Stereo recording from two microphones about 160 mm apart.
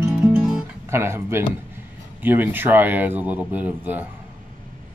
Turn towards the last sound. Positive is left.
turn(degrees=-10)  # may be behind; listen again after turning